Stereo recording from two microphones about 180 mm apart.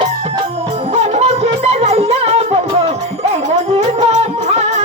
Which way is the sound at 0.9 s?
35° right (ahead or behind).